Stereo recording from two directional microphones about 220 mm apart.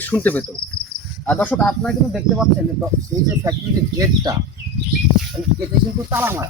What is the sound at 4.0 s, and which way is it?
Speech, 20° right (ahead or behind).